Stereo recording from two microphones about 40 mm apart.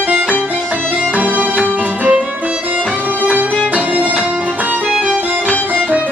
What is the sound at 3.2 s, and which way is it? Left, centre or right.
Music, right.